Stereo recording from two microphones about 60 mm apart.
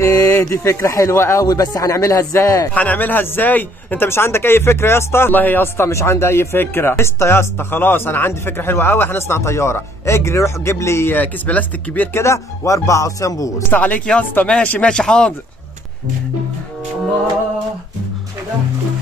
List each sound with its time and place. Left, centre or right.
0.0 s speech: left
1.1 s speech: left
1.4 s speech: left
2.7 s speech: left
4.1 s speech: left
5.9 s speech: left
9.4 s speech: left
11.1 s speech: left
12.1 s speech: left
13.7 s a man's voice: left